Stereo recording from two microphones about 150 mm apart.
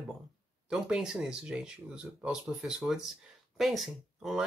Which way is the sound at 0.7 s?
5° right (ahead or behind).